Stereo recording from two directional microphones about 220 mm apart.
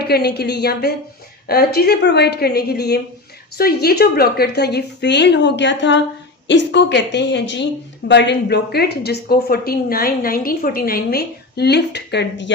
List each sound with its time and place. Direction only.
0.0 s a woman's voice: 45° left (ahead or behind)